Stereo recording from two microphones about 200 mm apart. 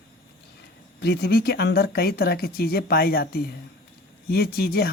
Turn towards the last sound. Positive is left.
turn(degrees=50)  # may be behind; listen again after turning